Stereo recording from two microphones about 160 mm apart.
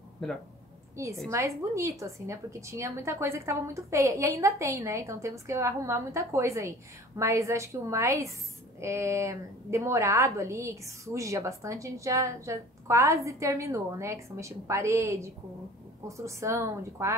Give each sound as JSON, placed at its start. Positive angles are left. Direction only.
{"t": 1.3, "sound": "a woman's voice", "side_deg": -20}